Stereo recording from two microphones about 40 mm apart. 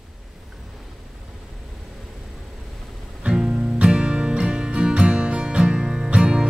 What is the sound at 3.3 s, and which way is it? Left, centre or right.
Music, right.